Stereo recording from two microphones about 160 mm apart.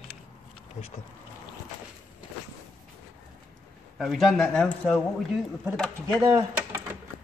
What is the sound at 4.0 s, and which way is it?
A man's voice, centre (ahead or behind).